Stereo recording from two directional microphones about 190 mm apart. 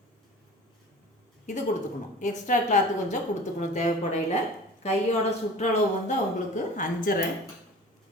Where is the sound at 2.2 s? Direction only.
40° left (ahead or behind).